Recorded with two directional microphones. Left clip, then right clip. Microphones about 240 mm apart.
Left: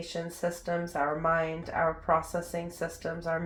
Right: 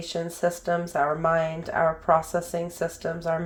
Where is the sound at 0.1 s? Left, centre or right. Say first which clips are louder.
Right 8 dB; right.